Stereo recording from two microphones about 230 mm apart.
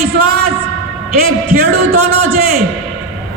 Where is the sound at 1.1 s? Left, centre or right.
Right.